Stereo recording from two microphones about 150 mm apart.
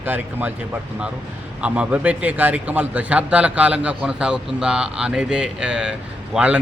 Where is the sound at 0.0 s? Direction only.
10° right (ahead or behind).